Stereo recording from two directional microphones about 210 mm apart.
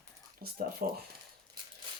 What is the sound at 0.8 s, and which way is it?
Speech, 40° right (ahead or behind).